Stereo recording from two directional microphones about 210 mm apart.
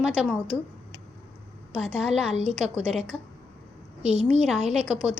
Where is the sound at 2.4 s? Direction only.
30° right (ahead or behind).